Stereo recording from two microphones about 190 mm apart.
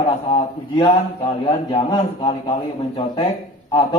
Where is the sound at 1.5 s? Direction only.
30° left (ahead or behind).